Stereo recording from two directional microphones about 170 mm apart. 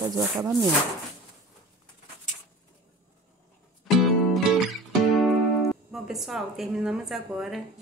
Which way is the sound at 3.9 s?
Centre (ahead or behind).